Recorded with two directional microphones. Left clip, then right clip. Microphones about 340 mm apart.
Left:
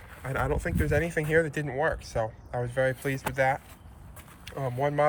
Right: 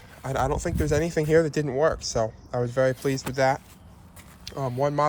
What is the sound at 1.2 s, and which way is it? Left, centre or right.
Speech, right.